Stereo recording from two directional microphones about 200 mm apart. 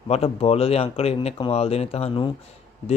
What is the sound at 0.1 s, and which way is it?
Speech, 30° left (ahead or behind).